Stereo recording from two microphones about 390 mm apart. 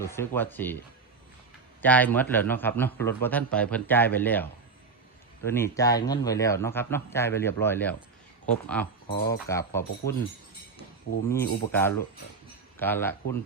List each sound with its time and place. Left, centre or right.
0.0 s a man's voice: centre
1.8 s a man's voice: centre
5.5 s a man's voice: centre
9.1 s speech: left
9.5 s a man's voice: centre
11.3 s a man's voice: centre